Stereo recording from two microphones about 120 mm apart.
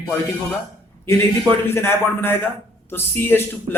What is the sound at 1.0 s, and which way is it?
A man's voice, 20° left (ahead or behind).